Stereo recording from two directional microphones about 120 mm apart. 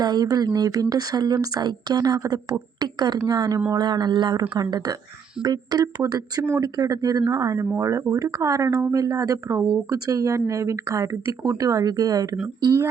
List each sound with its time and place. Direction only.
0.0 s speech: 35° right (ahead or behind)